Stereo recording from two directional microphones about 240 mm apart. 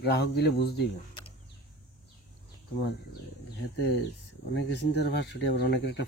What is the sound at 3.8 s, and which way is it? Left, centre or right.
Speech, left.